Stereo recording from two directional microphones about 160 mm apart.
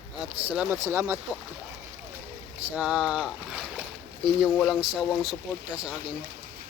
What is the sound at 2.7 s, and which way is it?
Speech, 5° right (ahead or behind).